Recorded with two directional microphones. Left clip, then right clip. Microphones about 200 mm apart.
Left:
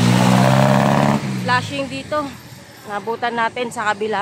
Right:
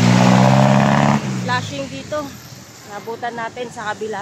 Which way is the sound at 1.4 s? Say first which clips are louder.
Left 3 dB; 20° left (ahead or behind).